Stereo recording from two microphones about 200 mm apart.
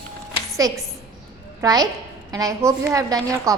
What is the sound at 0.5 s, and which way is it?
A woman's voice, 15° right (ahead or behind).